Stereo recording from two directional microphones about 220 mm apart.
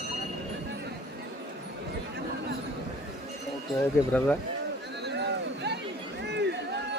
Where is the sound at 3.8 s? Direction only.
5° left (ahead or behind).